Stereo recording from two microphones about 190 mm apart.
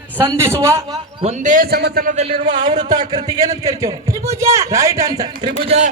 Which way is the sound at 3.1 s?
25° right (ahead or behind).